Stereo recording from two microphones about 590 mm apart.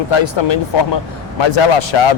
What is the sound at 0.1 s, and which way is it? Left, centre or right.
Speech, left.